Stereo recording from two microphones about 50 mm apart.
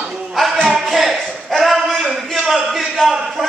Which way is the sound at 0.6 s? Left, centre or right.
Centre.